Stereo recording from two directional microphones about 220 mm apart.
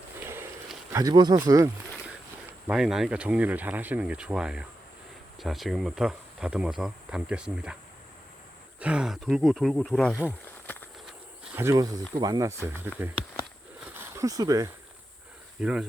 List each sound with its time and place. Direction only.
0.3 s a sound: 10° right (ahead or behind)
2.5 s speech: 5° right (ahead or behind)
8.8 s speech: 5° right (ahead or behind)
10.7 s walk: 5° left (ahead or behind)
11.5 s speech: 10° right (ahead or behind)
14.0 s speech: 15° right (ahead or behind)
15.6 s speech: 5° right (ahead or behind)